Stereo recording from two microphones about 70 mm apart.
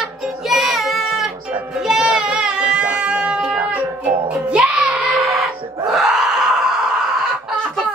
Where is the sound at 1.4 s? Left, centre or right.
Right.